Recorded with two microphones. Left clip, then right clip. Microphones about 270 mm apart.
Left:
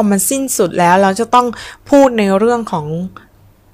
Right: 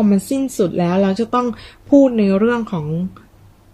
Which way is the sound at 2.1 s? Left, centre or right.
Left.